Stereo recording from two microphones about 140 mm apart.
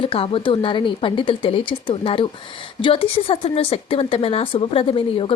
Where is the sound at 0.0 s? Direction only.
40° left (ahead or behind).